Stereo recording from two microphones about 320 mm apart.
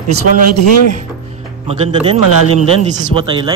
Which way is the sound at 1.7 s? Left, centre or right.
Centre.